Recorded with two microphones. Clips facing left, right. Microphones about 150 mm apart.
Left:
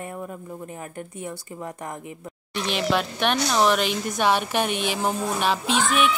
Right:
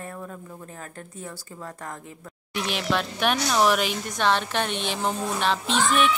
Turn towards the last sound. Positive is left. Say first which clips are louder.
# even
turn(degrees=5)  # may be behind; listen again after turning